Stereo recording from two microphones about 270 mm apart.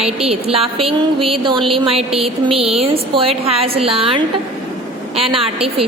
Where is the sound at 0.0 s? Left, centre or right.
Right.